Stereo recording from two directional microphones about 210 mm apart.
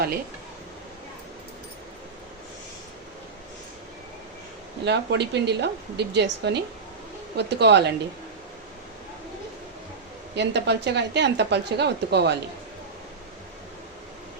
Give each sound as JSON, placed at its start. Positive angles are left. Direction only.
{"t": 4.9, "sound": "a woman's voice", "side_deg": -55}
{"t": 10.3, "sound": "a woman's voice", "side_deg": -55}